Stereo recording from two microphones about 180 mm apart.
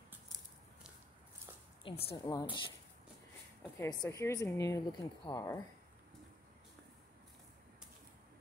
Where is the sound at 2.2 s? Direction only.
20° left (ahead or behind).